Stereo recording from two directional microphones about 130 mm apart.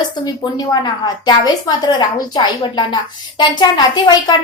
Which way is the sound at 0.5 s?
35° left (ahead or behind).